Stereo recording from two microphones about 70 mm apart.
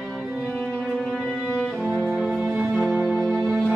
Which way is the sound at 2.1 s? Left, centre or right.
Centre.